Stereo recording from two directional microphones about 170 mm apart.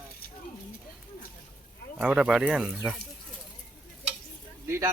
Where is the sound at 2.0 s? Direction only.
5° right (ahead or behind).